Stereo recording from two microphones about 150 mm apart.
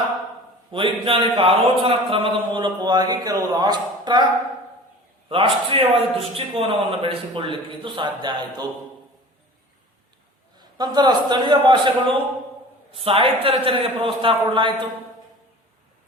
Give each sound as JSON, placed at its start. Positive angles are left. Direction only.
{"t": 0.7, "sound": "a man's voice", "side_deg": -35}
{"t": 5.3, "sound": "a man's voice", "side_deg": -35}
{"t": 10.6, "sound": "a man's voice", "side_deg": -30}